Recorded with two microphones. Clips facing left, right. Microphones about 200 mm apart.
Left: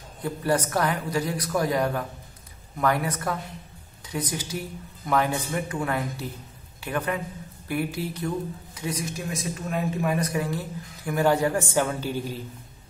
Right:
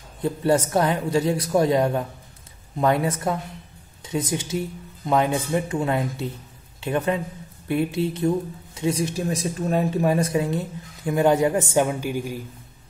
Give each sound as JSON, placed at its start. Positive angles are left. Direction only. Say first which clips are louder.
{"t": 0.2, "sound": "speech", "louder": "right 5 dB", "side_deg": -25}